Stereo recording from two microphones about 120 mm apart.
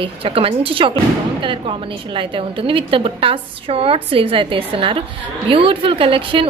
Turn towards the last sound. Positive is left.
turn(degrees=-50)  # may be behind; listen again after turning